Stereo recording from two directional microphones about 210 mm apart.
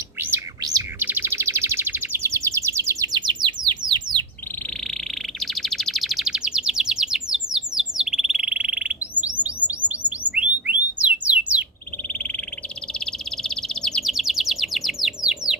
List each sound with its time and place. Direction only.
0.2 s bird: 10° right (ahead or behind)
5.4 s chirp: centre (ahead or behind)
9.6 s bird: 5° right (ahead or behind)
12.9 s bird: 5° left (ahead or behind)